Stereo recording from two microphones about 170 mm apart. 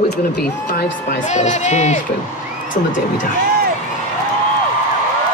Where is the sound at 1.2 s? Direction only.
45° left (ahead or behind).